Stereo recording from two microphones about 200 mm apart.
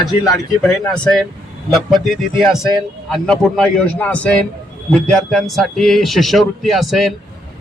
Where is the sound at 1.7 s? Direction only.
Centre (ahead or behind).